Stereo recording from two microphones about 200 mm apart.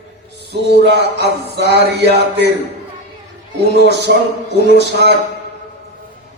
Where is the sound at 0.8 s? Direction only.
55° right (ahead or behind).